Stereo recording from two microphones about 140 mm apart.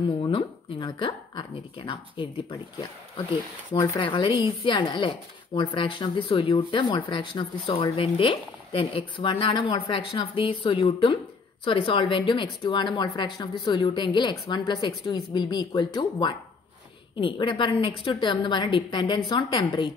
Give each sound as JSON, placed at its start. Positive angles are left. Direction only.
{"t": 0.2, "sound": "speech", "side_deg": 35}
{"t": 4.0, "sound": "speech", "side_deg": 35}